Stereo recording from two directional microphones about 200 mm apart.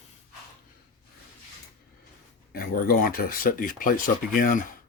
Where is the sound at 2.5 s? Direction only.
45° left (ahead or behind).